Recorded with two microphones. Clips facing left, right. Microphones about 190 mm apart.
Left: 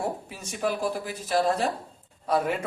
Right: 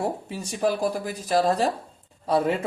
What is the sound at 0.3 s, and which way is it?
Speech, 35° right (ahead or behind).